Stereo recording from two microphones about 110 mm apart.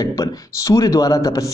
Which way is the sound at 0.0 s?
35° left (ahead or behind).